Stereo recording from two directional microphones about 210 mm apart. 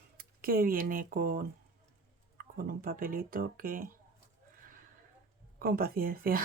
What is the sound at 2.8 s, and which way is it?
Speech, 45° right (ahead or behind).